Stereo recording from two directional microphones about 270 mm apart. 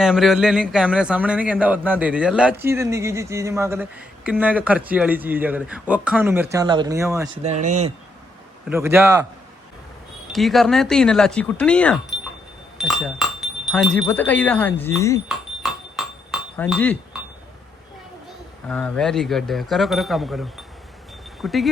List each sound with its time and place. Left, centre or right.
0.0 s a man's voice: centre
7.6 s speech: right
8.7 s speech: centre
10.3 s a man's voice: centre
15.6 s chink: centre
18.7 s a man's voice: centre